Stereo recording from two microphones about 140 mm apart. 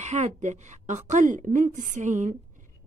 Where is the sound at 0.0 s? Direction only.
55° right (ahead or behind).